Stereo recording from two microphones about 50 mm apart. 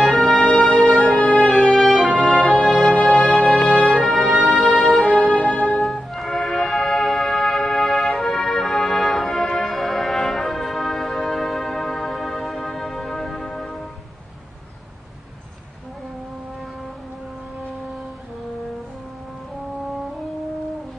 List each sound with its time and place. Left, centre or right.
0.2 s music: centre
5.4 s music: centre
5.8 s music: centre